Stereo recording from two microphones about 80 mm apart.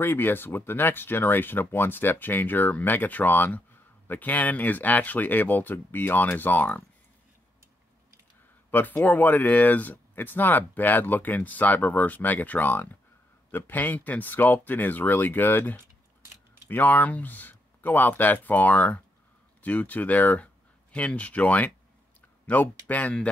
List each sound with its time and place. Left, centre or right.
0.0 s speech: left
8.6 s speech: left